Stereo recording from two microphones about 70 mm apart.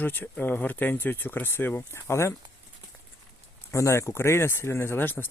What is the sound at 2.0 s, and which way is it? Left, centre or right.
Speech, left.